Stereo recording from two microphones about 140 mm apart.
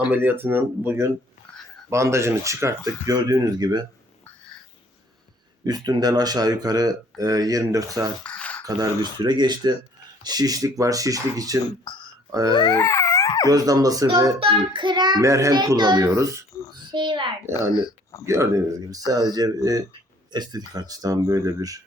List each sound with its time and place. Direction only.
0.0 s speech: 15° right (ahead or behind)
5.6 s speech: 30° right (ahead or behind)
8.2 s a sound: 10° left (ahead or behind)
8.6 s a child's voice: 25° right (ahead or behind)
11.9 s speech: 35° left (ahead or behind)
12.3 s speech: 25° right (ahead or behind)
12.5 s a sound: 25° left (ahead or behind)
13.5 s speech: 25° right (ahead or behind)
14.3 s a child's voice: 40° right (ahead or behind); by 16.4 s 20° right (ahead or behind)
16.7 s a sound: 35° right (ahead or behind)
17.5 s speech: 25° left (ahead or behind)
18.3 s speech: 20° right (ahead or behind)